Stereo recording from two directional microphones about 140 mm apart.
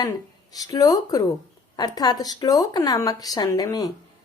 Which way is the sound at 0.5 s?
25° left (ahead or behind).